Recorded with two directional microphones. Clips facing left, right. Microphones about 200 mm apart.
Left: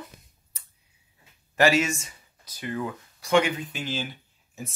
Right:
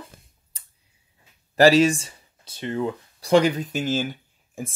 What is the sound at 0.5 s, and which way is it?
Clicking, 30° right (ahead or behind).